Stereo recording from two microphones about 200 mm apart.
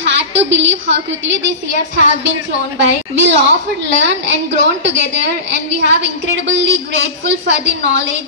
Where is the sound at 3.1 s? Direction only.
65° right (ahead or behind).